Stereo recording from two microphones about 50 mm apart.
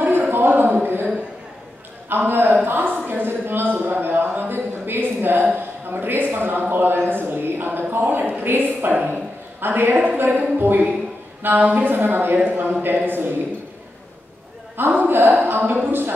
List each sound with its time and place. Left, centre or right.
0.3 s a sound: right
11.4 s a woman's voice: right
14.9 s a woman's voice: right